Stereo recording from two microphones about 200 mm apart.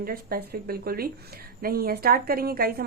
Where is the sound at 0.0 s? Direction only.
50° right (ahead or behind).